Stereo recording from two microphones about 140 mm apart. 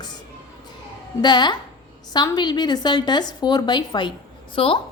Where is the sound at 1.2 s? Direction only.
30° left (ahead or behind).